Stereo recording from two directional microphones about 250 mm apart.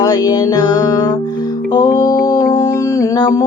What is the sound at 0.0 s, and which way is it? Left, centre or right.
Music, centre.